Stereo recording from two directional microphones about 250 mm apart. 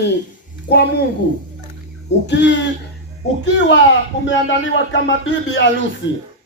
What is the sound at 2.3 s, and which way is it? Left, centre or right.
Speech, left.